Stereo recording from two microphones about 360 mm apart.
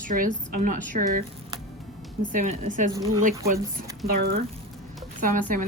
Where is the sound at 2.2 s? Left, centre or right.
Right.